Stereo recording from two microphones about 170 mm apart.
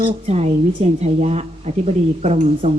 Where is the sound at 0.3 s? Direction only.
40° right (ahead or behind).